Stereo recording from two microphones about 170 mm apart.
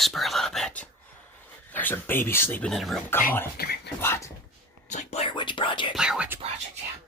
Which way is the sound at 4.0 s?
15° left (ahead or behind).